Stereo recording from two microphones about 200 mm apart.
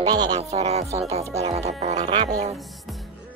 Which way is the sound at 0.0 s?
20° right (ahead or behind).